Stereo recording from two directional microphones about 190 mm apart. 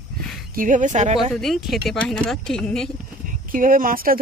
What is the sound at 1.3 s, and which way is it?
A woman's voice, centre (ahead or behind).